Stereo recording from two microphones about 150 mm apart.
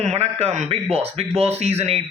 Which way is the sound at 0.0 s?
45° right (ahead or behind).